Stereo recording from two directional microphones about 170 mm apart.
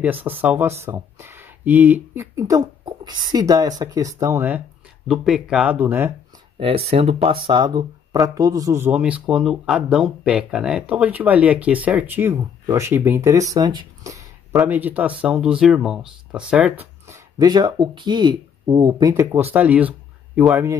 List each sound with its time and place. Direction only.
0.0 s speech: 10° right (ahead or behind)
6.6 s speech: 35° right (ahead or behind)
7.4 s speech: 25° right (ahead or behind)
14.5 s speech: 5° right (ahead or behind)
17.4 s speech: 25° right (ahead or behind)
19.3 s speech: 10° right (ahead or behind)